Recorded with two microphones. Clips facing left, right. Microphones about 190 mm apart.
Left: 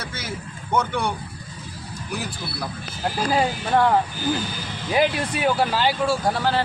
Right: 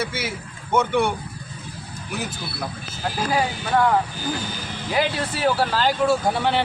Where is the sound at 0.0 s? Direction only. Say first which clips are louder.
Right 5 dB; 5° right (ahead or behind).